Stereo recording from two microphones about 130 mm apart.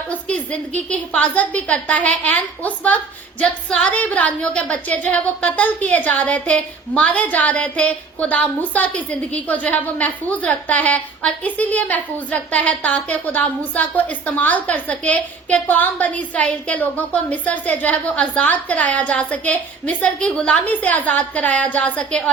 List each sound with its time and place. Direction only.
0.1 s a woman's voice: 10° left (ahead or behind)